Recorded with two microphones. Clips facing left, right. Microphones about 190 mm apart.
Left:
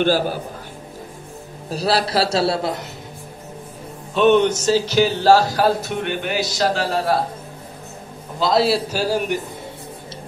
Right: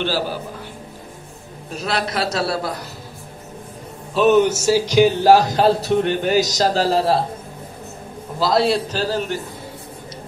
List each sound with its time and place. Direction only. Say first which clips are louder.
0.0 s a man's voice: left 4 dB; 50° left (ahead or behind)
1.7 s a man's voice: left 4 dB; 35° left (ahead or behind)
4.1 s a man's voice: even; 5° right (ahead or behind); by 5.7 s 20° right (ahead or behind)
5.8 s a man's voice: right 6 dB; 35° right (ahead or behind)
8.4 s a man's voice: even; centre (ahead or behind)